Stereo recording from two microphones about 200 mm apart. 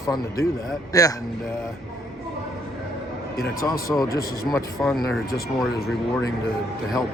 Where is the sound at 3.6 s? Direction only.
15° left (ahead or behind).